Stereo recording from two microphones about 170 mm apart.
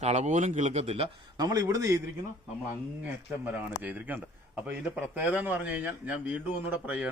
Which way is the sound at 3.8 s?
10° right (ahead or behind).